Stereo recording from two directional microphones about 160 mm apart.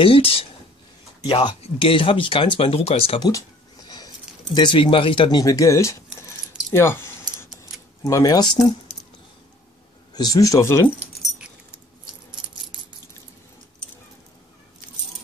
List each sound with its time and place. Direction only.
0.0 s speech: 35° left (ahead or behind)
3.3 s a sound: 25° left (ahead or behind)
4.6 s speech: 30° left (ahead or behind)
10.1 s speech: 25° left (ahead or behind)